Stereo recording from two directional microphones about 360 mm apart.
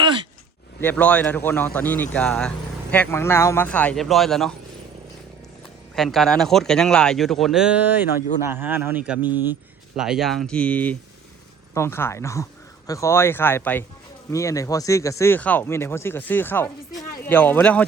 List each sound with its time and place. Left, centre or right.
0.0 s a sound: centre
0.8 s speech: centre
6.0 s speech: centre